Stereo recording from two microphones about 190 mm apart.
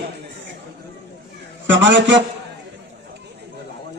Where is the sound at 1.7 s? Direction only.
70° right (ahead or behind).